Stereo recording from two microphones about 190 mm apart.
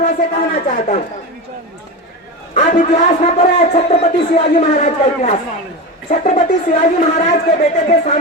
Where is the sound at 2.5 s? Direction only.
40° left (ahead or behind).